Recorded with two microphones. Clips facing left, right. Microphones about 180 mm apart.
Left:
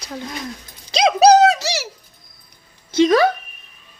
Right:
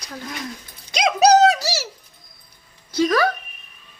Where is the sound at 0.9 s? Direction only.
30° left (ahead or behind).